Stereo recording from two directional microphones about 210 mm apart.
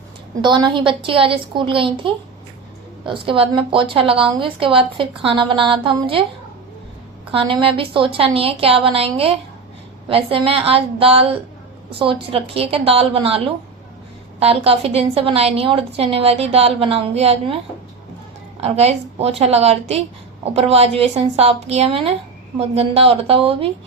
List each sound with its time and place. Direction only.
0.4 s speech: 20° right (ahead or behind)
7.3 s speech: 25° right (ahead or behind)
18.6 s speech: 30° right (ahead or behind)